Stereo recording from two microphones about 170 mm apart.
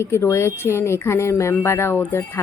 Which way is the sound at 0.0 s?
15° left (ahead or behind).